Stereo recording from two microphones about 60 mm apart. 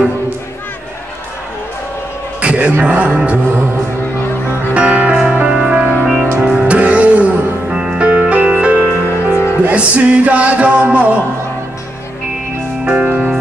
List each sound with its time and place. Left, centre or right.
2.4 s a sound: right
2.8 s music: centre
4.7 s music: centre
6.7 s music: right
12.8 s music: centre